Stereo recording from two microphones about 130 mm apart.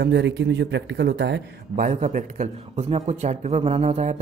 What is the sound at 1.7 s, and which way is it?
A man's voice, 80° right.